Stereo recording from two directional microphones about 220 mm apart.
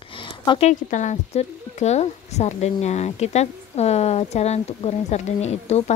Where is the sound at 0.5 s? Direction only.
30° left (ahead or behind).